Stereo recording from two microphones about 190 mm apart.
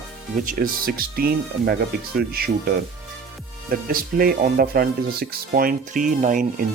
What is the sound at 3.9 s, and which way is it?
Speech, 50° right (ahead or behind).